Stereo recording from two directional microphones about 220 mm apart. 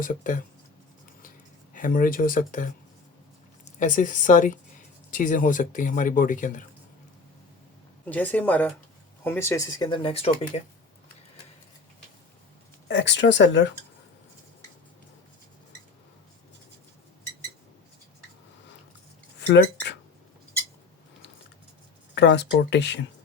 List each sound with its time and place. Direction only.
0.0 s speech: 35° left (ahead or behind)
1.7 s speech: 40° left (ahead or behind)
3.8 s speech: 35° left (ahead or behind)
8.1 s speech: 5° left (ahead or behind); by 10.6 s 25° left (ahead or behind)
12.9 s speech: 55° left (ahead or behind)
19.4 s speech: 55° left (ahead or behind)
22.1 s speech: 50° left (ahead or behind)